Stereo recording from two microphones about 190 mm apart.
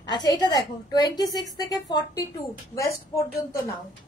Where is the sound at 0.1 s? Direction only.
25° left (ahead or behind).